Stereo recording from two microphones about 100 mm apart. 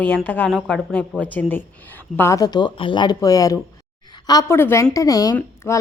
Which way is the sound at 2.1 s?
30° left (ahead or behind).